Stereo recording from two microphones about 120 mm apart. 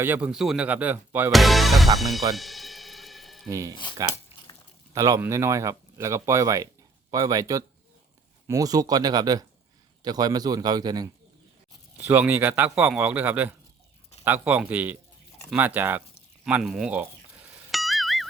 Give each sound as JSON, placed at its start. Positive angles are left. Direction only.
{"t": 0.0, "sound": "speech", "side_deg": -15}
{"t": 0.3, "sound": "speech", "side_deg": -5}
{"t": 1.3, "sound": "music", "side_deg": 0}
{"t": 3.5, "sound": "speech", "side_deg": -25}
{"t": 4.9, "sound": "a man's voice", "side_deg": -25}
{"t": 11.9, "sound": "speech", "side_deg": -15}
{"t": 16.4, "sound": "a sound", "side_deg": -5}
{"t": 17.7, "sound": "music", "side_deg": 0}